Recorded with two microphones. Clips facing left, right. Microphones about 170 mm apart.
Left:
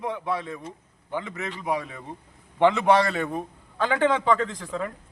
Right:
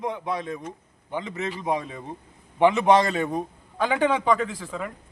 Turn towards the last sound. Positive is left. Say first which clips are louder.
# left 1 dB
turn(degrees=-5)  # may be behind; listen again after turning